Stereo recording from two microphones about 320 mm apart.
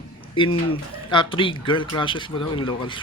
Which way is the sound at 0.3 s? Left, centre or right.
Centre.